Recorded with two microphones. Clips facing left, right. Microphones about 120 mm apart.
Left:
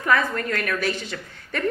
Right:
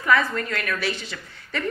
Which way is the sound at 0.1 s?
45° left (ahead or behind).